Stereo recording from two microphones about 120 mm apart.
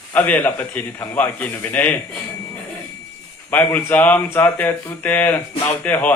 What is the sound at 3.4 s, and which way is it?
A man's voice, 15° left (ahead or behind).